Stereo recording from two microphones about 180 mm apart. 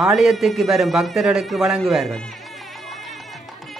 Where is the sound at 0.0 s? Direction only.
Centre (ahead or behind).